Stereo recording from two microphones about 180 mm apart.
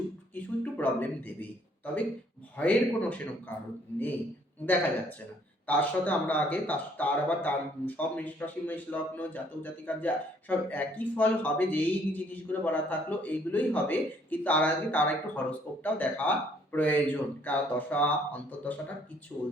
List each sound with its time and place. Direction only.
0.3 s a sound: 10° left (ahead or behind)
2.6 s speech: 10° left (ahead or behind)
4.6 s speech: 10° left (ahead or behind)